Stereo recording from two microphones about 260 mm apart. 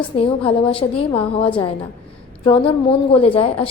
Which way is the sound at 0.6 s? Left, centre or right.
Left.